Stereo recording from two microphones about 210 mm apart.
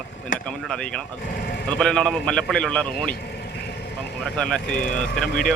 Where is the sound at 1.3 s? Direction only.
45° left (ahead or behind).